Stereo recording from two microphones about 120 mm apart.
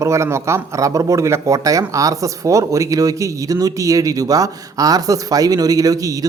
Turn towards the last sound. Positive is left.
turn(degrees=-30)  # may be behind; listen again after turning